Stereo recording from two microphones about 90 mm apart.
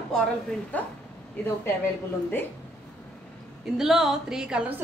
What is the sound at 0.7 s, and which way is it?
Speech, 15° left (ahead or behind).